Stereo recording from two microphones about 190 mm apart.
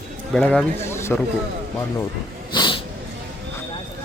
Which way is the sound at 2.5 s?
25° left (ahead or behind).